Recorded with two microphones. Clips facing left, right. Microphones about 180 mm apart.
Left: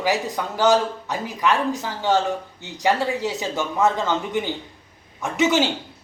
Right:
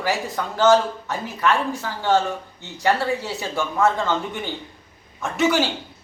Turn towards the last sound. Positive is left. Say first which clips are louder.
# left 1 dB
turn(degrees=20)  # may be behind; listen again after turning